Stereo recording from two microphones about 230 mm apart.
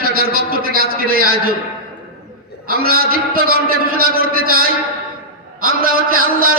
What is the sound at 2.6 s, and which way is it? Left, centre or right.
A man's voice, right.